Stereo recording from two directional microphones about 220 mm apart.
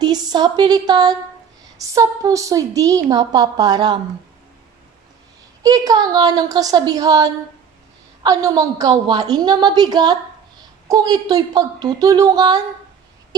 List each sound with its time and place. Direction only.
0.0 s a woman's voice: 20° right (ahead or behind)
5.6 s a woman's voice: 15° right (ahead or behind)